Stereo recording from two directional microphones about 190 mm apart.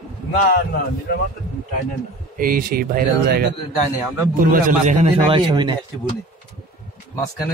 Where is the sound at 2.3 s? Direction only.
50° right (ahead or behind).